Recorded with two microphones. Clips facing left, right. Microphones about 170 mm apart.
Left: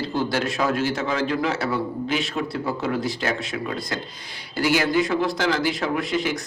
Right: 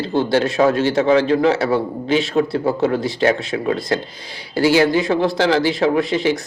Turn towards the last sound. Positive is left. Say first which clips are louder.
# right 7 dB
turn(degrees=-30)  # may be behind; listen again after turning